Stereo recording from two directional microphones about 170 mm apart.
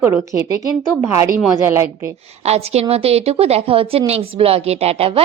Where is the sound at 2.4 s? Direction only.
40° right (ahead or behind).